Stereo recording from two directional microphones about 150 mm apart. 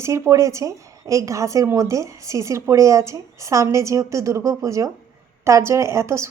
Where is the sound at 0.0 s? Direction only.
20° right (ahead or behind).